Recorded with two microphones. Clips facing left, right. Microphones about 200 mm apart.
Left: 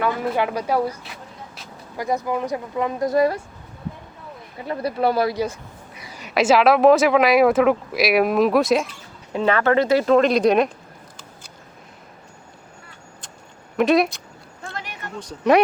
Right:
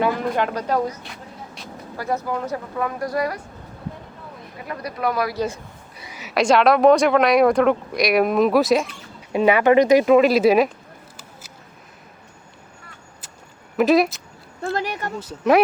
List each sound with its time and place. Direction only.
0.3 s speech: 10° left (ahead or behind); by 3.4 s 25° left (ahead or behind)
4.6 s speech: 30° left (ahead or behind)
6.1 s speech: centre (ahead or behind)
9.3 s speech: 15° right (ahead or behind)
13.7 s speech: centre (ahead or behind)
14.6 s a sound: 40° right (ahead or behind)
15.2 s speech: 5° right (ahead or behind)